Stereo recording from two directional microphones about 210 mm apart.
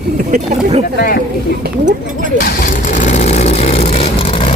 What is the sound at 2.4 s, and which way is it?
Vehicle, 40° left (ahead or behind).